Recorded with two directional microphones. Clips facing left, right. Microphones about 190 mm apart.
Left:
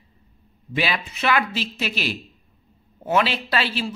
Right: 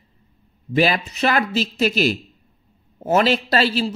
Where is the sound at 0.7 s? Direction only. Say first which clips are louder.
Right 7 dB; 40° right (ahead or behind).